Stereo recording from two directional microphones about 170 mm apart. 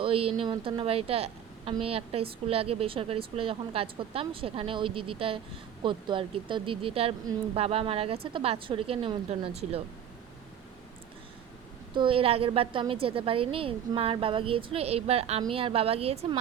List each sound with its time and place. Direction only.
0.0 s a woman's voice: 35° right (ahead or behind)
11.9 s a woman's voice: 30° right (ahead or behind)